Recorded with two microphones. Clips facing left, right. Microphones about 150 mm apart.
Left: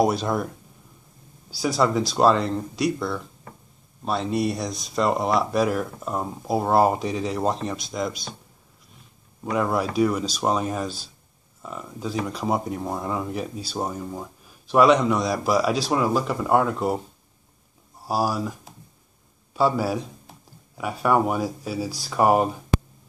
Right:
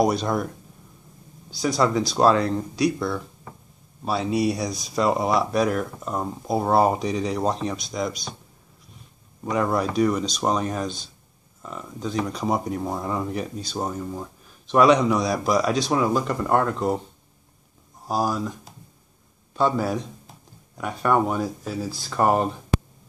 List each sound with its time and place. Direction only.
0.0 s speech: centre (ahead or behind)
1.5 s speech: 5° left (ahead or behind)
9.4 s speech: 5° left (ahead or behind)
18.0 s speech: 5° left (ahead or behind)
19.5 s speech: 5° left (ahead or behind)